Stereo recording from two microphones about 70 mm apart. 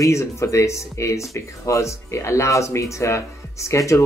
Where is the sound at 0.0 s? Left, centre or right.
Left.